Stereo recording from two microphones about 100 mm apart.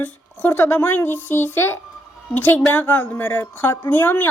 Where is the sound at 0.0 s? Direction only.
20° left (ahead or behind).